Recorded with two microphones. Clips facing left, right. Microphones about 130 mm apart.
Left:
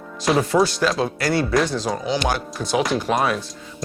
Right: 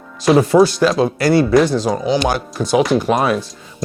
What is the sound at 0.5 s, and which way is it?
Speech, 35° right (ahead or behind).